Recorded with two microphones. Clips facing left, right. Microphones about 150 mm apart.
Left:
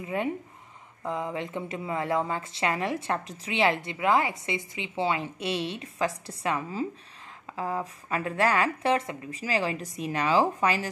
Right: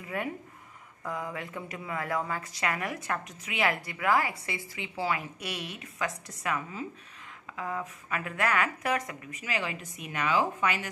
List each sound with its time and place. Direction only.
0.0 s a woman's voice: 25° left (ahead or behind)